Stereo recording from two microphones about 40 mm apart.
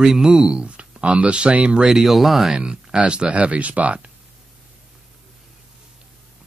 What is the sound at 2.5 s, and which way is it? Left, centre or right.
Speech, right.